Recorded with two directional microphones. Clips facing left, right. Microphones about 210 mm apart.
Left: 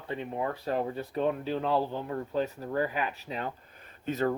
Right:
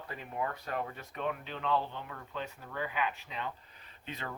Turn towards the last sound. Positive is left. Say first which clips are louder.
# left 14 dB
turn(degrees=45)  # may be behind; listen again after turning